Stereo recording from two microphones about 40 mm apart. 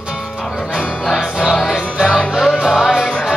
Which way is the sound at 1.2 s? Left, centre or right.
Centre.